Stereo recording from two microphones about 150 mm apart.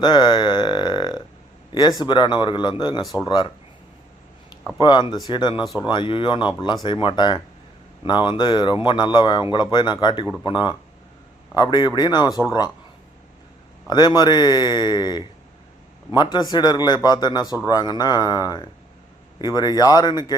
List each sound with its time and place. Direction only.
0.0 s a sound: 30° left (ahead or behind)
2.0 s a man's voice: 30° left (ahead or behind)
3.0 s speech: centre (ahead or behind)
3.2 s a man's voice: 30° left (ahead or behind)
4.8 s a man's voice: 30° left (ahead or behind)
13.8 s a man's voice: 30° left (ahead or behind)